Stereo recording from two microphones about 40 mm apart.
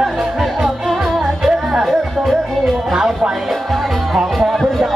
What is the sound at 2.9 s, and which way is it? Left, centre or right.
Speech, centre.